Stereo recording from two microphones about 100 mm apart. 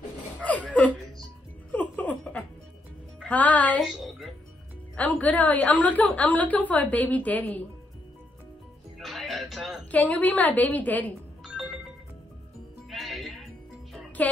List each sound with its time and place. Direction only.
0.4 s a sound: 15° left (ahead or behind)
1.7 s music: 15° left (ahead or behind)
3.3 s speech: 15° left (ahead or behind)
3.8 s music: centre (ahead or behind)
4.9 s a woman's voice: 15° left (ahead or behind)
8.9 s music: centre (ahead or behind)
9.8 s a woman's voice: 15° left (ahead or behind)
11.4 s music: centre (ahead or behind)
12.9 s music: centre (ahead or behind)
14.2 s a woman's voice: 15° left (ahead or behind)